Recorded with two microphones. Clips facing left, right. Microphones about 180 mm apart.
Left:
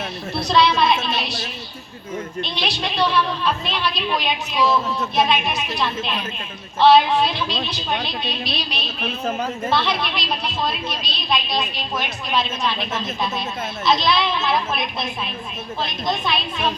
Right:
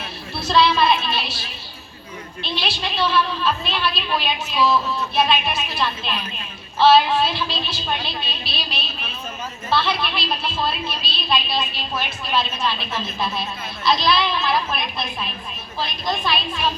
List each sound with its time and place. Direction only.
0.3 s a child's voice: 15° left (ahead or behind)
2.4 s a woman's voice: 20° left (ahead or behind)
9.0 s a woman's voice: 60° left (ahead or behind)
9.7 s a woman's voice: 15° left (ahead or behind)